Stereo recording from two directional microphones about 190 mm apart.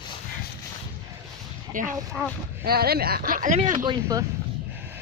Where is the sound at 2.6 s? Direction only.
55° right (ahead or behind).